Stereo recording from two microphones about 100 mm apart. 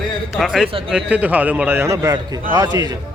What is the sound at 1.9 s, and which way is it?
Speech, 35° right (ahead or behind).